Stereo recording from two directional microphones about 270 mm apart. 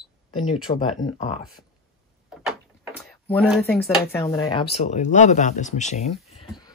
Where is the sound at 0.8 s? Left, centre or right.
Centre.